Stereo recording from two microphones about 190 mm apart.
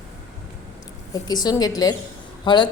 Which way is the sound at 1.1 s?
20° left (ahead or behind).